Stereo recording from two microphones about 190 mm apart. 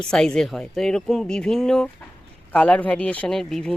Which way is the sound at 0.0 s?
5° left (ahead or behind).